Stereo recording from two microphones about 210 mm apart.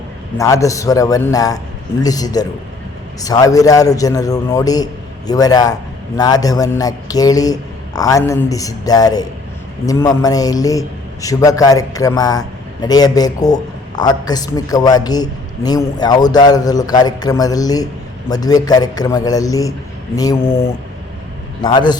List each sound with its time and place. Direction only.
0.3 s a man's voice: 15° left (ahead or behind)
21.6 s speech: 20° left (ahead or behind)